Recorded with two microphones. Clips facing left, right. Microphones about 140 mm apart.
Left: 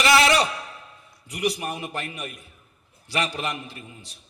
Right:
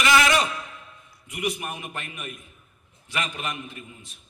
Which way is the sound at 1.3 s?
35° left (ahead or behind).